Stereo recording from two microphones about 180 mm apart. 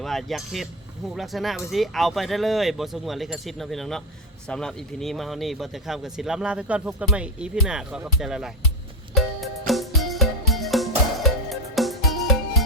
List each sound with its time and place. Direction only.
0.0 s speech: centre (ahead or behind)
9.1 s music: centre (ahead or behind)